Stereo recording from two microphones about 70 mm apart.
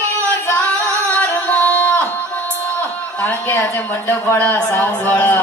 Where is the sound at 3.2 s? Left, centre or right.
Left.